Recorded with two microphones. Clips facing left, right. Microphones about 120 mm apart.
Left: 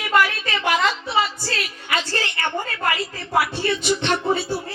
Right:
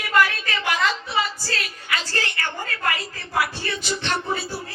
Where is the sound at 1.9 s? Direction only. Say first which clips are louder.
Left 3 dB; 30° left (ahead or behind).